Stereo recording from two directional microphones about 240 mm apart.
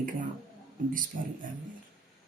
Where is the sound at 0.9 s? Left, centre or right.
Right.